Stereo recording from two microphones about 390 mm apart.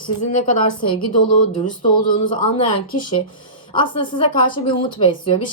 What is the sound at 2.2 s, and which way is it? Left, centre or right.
Speech, centre.